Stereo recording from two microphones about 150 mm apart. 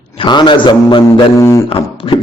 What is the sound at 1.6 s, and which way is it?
Speech, 35° left (ahead or behind).